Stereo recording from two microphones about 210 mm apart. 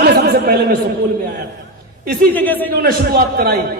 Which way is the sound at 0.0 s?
45° right (ahead or behind).